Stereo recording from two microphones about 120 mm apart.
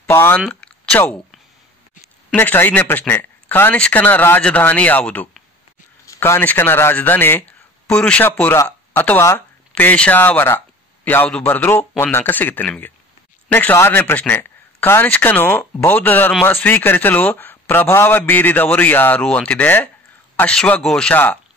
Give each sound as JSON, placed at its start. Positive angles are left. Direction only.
{"t": 0.0, "sound": "speech", "side_deg": 15}
{"t": 0.4, "sound": "speech", "side_deg": 5}
{"t": 2.3, "sound": "speech", "side_deg": 15}